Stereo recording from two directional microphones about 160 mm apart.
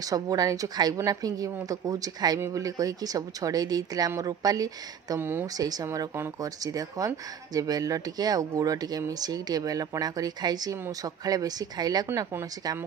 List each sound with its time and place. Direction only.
0.0 s speech: 20° right (ahead or behind)